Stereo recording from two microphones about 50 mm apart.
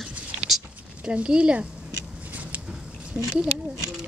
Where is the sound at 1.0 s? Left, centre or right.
Right.